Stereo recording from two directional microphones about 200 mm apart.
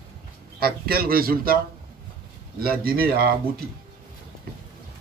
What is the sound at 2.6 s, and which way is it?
Speech, 50° right (ahead or behind).